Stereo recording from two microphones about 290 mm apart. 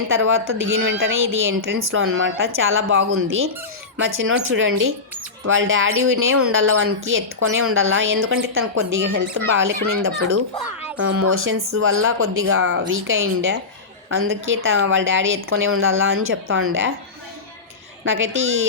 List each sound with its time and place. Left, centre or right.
0.1 s a woman's voice: right
18.0 s a woman's voice: right